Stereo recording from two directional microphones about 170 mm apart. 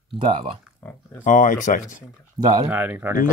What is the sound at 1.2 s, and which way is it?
Speech, 50° left (ahead or behind).